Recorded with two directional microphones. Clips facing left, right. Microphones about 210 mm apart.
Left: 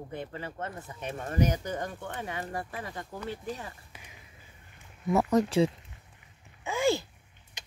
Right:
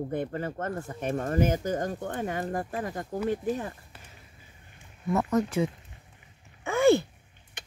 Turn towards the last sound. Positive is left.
turn(degrees=-60)  # may be behind; listen again after turning